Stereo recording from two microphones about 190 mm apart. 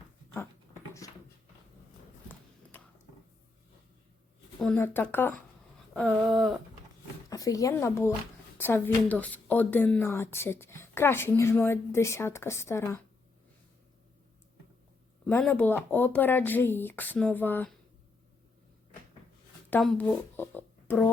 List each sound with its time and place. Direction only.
0.3 s dog: 15° left (ahead or behind)
2.7 s a sound: 10° left (ahead or behind)
4.6 s speech: 10° left (ahead or behind)
5.9 s a sound: 5° left (ahead or behind)
7.3 s speech: 20° left (ahead or behind)
15.3 s speech: 5° left (ahead or behind)
19.7 s speech: 5° left (ahead or behind)